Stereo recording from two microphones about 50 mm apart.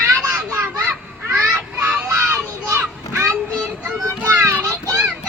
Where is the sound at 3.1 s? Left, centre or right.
Right.